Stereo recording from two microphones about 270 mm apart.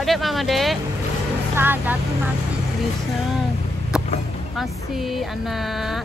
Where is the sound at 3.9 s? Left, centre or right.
Centre.